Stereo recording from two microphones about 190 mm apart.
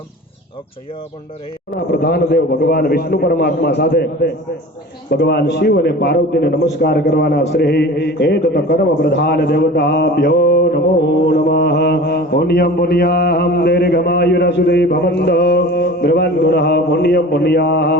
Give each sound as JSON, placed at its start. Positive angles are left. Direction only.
{"t": 1.9, "sound": "a man's voice", "side_deg": 60}
{"t": 11.3, "sound": "mantra", "side_deg": 60}